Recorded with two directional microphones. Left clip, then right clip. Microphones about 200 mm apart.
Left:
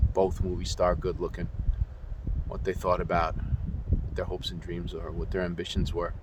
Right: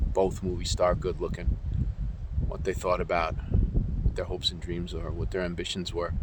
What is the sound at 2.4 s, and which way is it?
Speech, 20° right (ahead or behind).